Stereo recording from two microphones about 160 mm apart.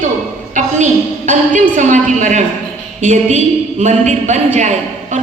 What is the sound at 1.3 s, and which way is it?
A woman's voice, 50° right (ahead or behind).